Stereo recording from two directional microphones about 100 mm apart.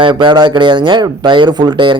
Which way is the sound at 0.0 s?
55° right (ahead or behind).